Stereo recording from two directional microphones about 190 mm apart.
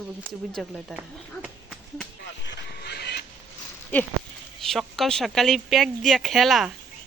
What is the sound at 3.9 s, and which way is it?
Speech, 10° left (ahead or behind).